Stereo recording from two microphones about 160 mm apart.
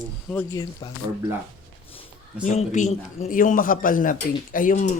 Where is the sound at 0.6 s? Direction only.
30° left (ahead or behind).